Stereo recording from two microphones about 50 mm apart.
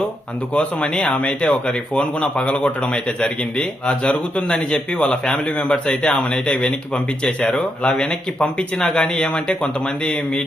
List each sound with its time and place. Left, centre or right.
0.5 s speech: left
4.6 s speech: centre